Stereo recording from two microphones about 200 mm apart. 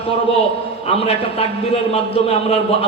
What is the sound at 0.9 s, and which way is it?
A man's voice, 30° left (ahead or behind).